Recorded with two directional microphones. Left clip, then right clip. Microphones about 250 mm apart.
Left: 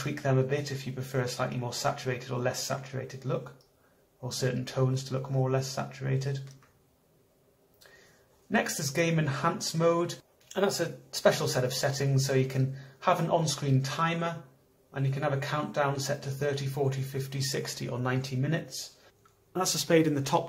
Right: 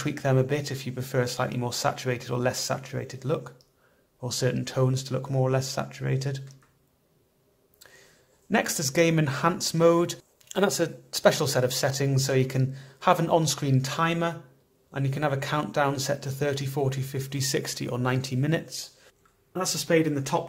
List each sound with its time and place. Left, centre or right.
0.0 s speech: right
8.5 s speech: right
19.5 s speech: centre